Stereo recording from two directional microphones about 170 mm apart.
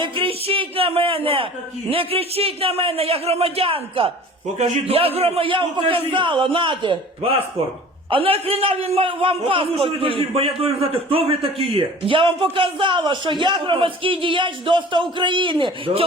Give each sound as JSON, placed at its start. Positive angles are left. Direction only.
{"t": 0.0, "sound": "a man's voice", "side_deg": -30}